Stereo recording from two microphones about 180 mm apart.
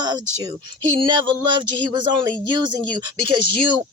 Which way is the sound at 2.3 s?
25° right (ahead or behind).